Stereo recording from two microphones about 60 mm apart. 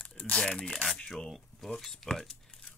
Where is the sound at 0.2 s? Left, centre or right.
Centre.